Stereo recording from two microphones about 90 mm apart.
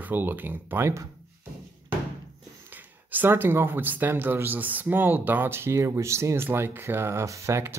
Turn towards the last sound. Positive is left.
turn(degrees=-30)  # may be behind; listen again after turning